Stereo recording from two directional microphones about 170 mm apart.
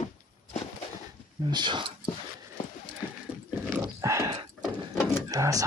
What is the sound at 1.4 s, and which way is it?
Speech, 25° right (ahead or behind).